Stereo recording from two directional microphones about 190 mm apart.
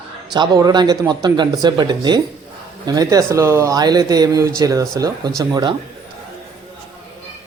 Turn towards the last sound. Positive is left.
turn(degrees=-20)  # may be behind; listen again after turning